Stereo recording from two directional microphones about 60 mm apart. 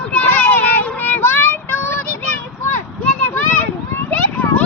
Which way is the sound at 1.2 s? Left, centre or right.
Left.